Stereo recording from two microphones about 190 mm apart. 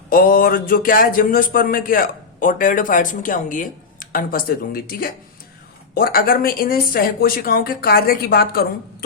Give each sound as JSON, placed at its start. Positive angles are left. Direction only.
{"t": 0.1, "sound": "speech", "side_deg": 50}